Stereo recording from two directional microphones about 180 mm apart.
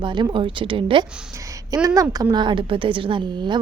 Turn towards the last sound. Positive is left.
turn(degrees=-25)  # may be behind; listen again after turning